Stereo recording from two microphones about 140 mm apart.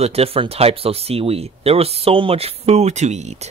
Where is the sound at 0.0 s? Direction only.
45° right (ahead or behind).